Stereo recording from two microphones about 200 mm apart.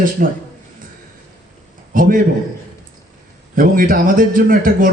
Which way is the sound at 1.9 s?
45° right (ahead or behind).